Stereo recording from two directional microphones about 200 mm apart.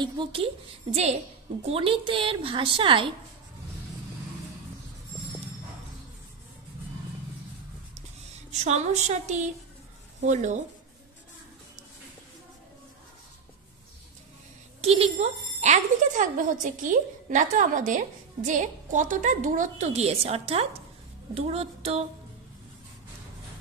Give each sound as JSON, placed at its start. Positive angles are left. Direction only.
{"t": 0.0, "sound": "a woman's voice", "side_deg": -25}
{"t": 1.6, "sound": "a woman's voice", "side_deg": -30}
{"t": 8.5, "sound": "speech", "side_deg": -35}
{"t": 14.8, "sound": "a woman's voice", "side_deg": -30}